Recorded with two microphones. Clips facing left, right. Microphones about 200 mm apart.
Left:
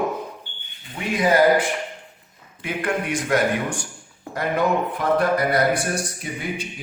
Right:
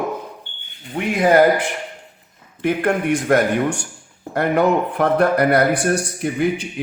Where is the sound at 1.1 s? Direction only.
55° right (ahead or behind).